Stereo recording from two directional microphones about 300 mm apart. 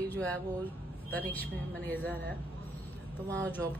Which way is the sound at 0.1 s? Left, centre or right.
Centre.